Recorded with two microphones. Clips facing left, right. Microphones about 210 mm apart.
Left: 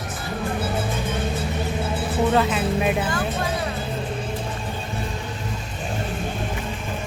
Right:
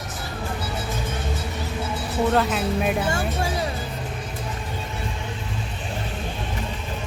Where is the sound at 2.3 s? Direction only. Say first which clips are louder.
Left 1 dB; centre (ahead or behind).